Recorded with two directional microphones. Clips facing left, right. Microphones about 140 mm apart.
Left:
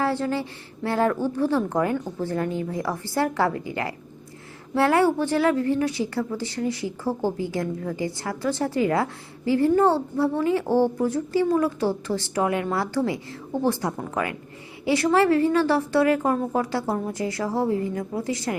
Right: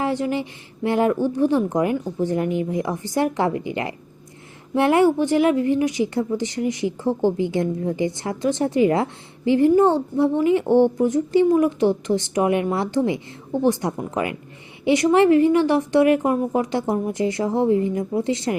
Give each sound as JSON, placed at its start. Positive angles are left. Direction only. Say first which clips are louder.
{"t": 0.0, "sound": "a woman's voice", "louder": "right 2 dB", "side_deg": -15}
{"t": 7.1, "sound": "a woman's voice", "louder": "right 5 dB", "side_deg": 10}
{"t": 7.3, "sound": "a woman's voice", "louder": "right 5 dB", "side_deg": -20}